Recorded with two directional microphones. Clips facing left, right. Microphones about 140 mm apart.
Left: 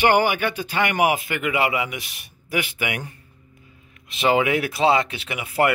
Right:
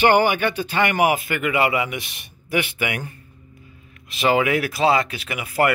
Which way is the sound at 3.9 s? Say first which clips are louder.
Even; 25° left (ahead or behind).